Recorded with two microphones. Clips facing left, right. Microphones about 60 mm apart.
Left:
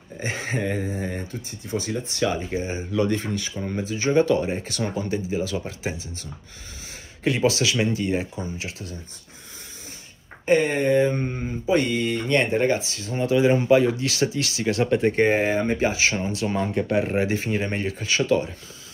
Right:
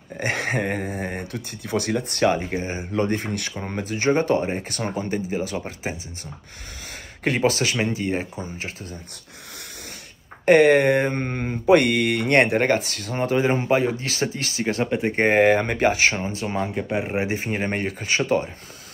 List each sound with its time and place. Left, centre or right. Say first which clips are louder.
0.2 s mantra: right 3 dB; right
2.9 s speech: even; right
7.2 s speech: even; right
10.4 s mantra: right 6 dB; right
13.2 s speech: left 2 dB; right
14.9 s speech: left 3 dB; centre
15.1 s speech: right 3 dB; right
16.4 s speech: left 2 dB; centre; by 18.5 s right